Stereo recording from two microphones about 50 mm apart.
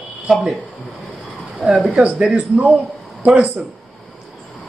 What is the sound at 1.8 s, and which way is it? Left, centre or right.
A man's voice, right.